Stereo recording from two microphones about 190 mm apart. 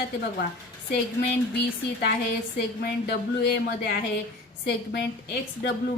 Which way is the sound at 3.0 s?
60° left (ahead or behind).